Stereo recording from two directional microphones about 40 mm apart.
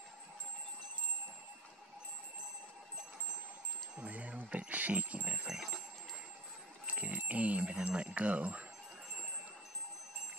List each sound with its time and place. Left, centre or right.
4.0 s music: right
6.9 s clock: right
7.9 s speech: right